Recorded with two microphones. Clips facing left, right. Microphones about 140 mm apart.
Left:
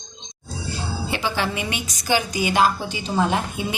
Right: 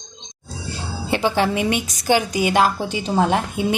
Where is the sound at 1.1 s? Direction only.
50° right (ahead or behind).